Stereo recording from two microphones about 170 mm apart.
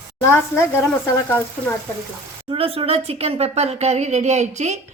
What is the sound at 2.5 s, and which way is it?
Speech, 35° right (ahead or behind).